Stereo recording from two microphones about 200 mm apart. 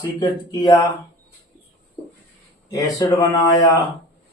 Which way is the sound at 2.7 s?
15° left (ahead or behind).